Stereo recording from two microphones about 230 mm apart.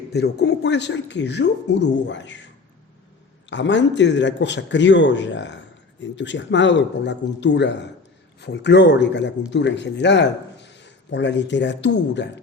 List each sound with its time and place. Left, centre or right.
0.1 s speech: left
3.5 s speech: left